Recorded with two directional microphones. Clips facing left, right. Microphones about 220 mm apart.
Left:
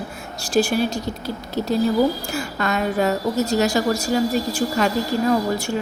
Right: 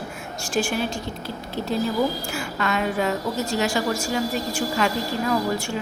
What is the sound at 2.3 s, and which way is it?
A woman's voice, 40° left (ahead or behind).